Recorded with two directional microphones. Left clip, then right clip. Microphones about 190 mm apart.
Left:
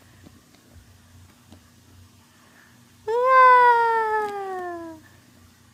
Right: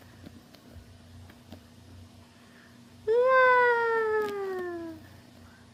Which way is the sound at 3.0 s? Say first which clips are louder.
Left 6 dB; 25° left (ahead or behind).